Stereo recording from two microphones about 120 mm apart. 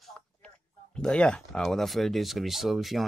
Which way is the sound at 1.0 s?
10° left (ahead or behind).